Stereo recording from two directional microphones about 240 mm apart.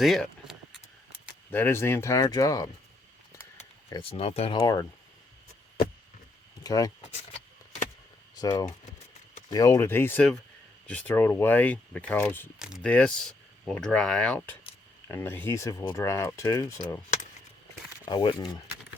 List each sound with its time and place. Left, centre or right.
0.0 s keys jangling: centre
1.5 s speech: centre
4.1 s speech: left
6.6 s speech: centre
8.4 s speech: centre
12.5 s speech: centre
18.0 s speech: centre